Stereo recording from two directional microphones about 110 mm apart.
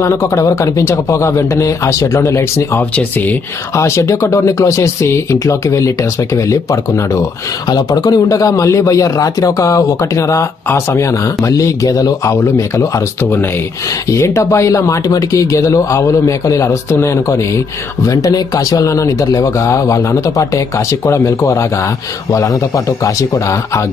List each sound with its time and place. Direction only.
0.0 s speech: 25° left (ahead or behind)
3.0 s speech: 15° left (ahead or behind)
3.7 s speech: 25° left (ahead or behind)